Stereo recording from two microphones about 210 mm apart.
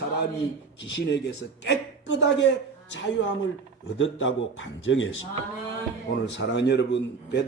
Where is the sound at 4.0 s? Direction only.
65° left (ahead or behind).